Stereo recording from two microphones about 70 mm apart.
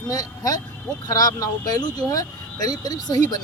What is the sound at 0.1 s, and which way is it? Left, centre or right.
Speech, left.